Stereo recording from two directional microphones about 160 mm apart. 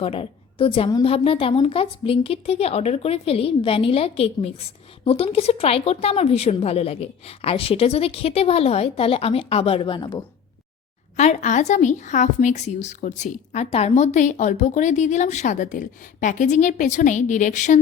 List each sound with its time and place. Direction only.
0.0 s a woman's voice: 35° left (ahead or behind)
11.2 s a woman's voice: 45° left (ahead or behind)